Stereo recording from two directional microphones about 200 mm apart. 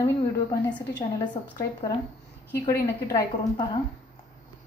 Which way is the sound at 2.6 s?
15° left (ahead or behind).